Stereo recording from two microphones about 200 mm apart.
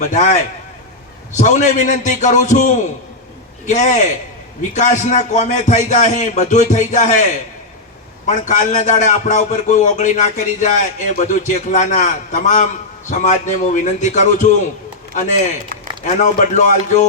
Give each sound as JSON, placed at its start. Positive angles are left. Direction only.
{"t": 0.0, "sound": "a man's voice", "side_deg": 35}
{"t": 1.4, "sound": "a man's voice", "side_deg": 35}
{"t": 8.3, "sound": "a man's voice", "side_deg": 35}